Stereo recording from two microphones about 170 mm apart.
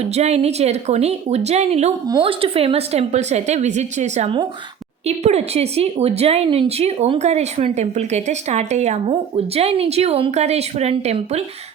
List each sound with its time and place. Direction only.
0.0 s speech: 40° right (ahead or behind)
2.0 s speech: 20° right (ahead or behind)
2.4 s speech: 35° right (ahead or behind)